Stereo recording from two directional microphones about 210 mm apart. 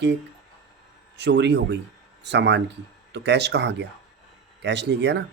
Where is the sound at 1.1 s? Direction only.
55° right (ahead or behind).